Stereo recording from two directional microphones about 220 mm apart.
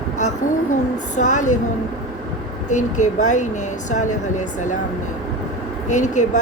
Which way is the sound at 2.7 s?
35° left (ahead or behind).